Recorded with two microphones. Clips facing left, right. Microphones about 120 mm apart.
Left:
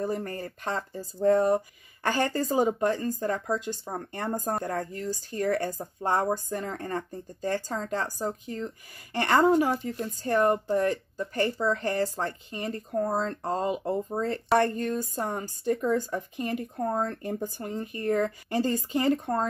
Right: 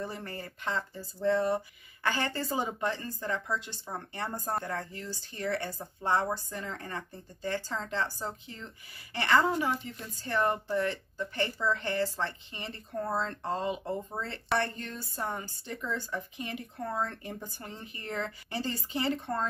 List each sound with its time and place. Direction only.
0.0 s speech: 45° left (ahead or behind)